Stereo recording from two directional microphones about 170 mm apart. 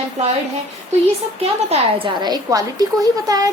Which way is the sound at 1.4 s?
35° right (ahead or behind).